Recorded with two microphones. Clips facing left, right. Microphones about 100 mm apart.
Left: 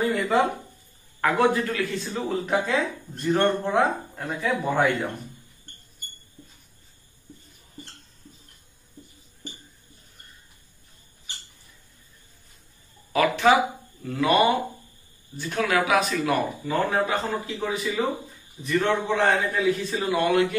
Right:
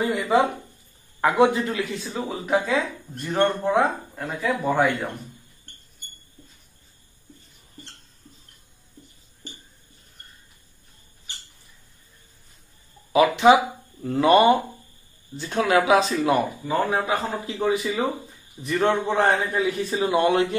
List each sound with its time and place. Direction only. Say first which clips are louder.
0.1 s a sound: right 2 dB; 15° right (ahead or behind)
1.2 s speech: right 2 dB; 20° right (ahead or behind)
2.0 s speech: even; 5° right (ahead or behind)
13.1 s speech: right 4 dB; 20° right (ahead or behind)
14.0 s speech: right 4 dB; 35° right (ahead or behind)
19.2 s speech: left 2 dB; 20° right (ahead or behind)